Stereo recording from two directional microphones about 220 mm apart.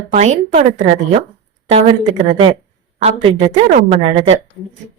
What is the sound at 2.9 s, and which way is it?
A woman's voice, 30° right (ahead or behind).